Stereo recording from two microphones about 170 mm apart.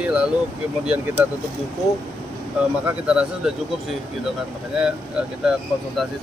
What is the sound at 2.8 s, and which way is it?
Speech, 5° right (ahead or behind).